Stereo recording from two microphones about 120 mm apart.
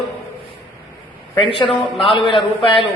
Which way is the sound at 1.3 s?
40° left (ahead or behind).